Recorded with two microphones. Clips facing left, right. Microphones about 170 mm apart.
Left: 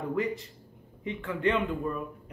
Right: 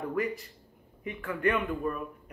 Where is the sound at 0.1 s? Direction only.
20° left (ahead or behind).